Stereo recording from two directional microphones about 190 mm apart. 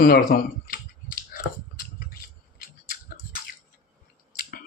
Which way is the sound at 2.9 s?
50° left (ahead or behind).